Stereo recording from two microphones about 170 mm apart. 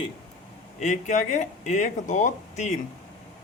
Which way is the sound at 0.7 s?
45° left (ahead or behind).